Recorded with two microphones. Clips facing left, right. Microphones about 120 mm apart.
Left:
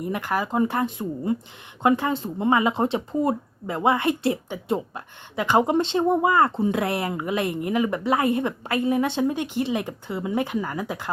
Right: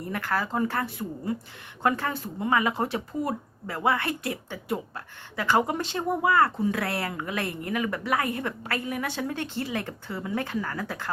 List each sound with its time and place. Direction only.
0.0 s speech: 15° left (ahead or behind)